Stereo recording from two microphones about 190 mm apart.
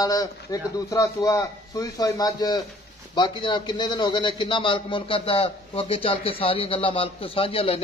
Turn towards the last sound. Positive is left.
turn(degrees=30)  # may be behind; listen again after turning